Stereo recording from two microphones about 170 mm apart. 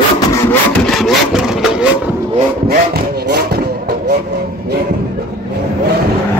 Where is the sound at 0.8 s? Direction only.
Centre (ahead or behind).